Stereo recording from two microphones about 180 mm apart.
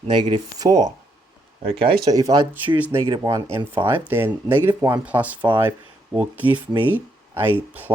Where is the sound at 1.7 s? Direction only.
30° right (ahead or behind).